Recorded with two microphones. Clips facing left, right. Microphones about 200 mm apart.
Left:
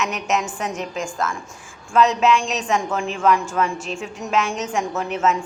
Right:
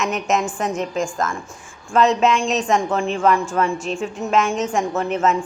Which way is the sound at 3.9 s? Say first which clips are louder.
Right 5 dB; 40° right (ahead or behind).